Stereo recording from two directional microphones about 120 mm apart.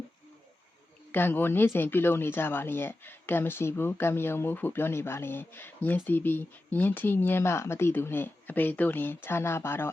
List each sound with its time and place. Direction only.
1.1 s speech: 15° left (ahead or behind)